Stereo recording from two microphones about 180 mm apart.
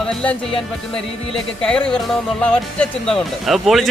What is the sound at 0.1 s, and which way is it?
Speech, 5° left (ahead or behind).